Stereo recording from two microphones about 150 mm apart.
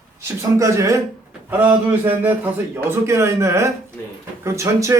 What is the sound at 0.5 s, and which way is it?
Speech, 20° right (ahead or behind).